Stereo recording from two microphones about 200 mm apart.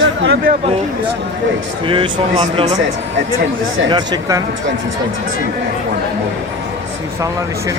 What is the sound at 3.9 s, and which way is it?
Speech, 20° right (ahead or behind).